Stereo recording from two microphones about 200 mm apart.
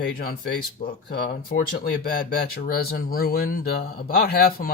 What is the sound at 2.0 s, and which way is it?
Speech, 50° left (ahead or behind).